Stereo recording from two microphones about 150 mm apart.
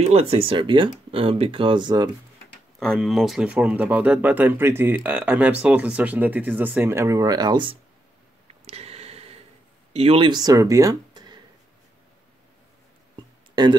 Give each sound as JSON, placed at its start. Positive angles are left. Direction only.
{"t": 0.0, "sound": "speech", "side_deg": -45}
{"t": 2.8, "sound": "speech", "side_deg": 0}
{"t": 8.6, "sound": "a sound", "side_deg": -45}
{"t": 9.9, "sound": "speech", "side_deg": -40}
{"t": 13.6, "sound": "speech", "side_deg": -30}